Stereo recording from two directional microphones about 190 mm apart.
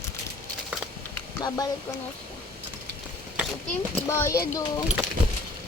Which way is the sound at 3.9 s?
15° left (ahead or behind).